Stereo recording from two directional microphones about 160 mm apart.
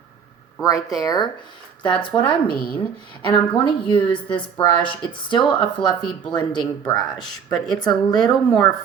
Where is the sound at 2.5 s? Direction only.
65° left (ahead or behind).